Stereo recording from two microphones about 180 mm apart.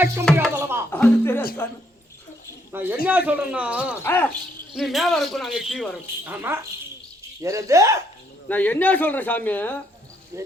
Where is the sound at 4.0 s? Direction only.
10° left (ahead or behind).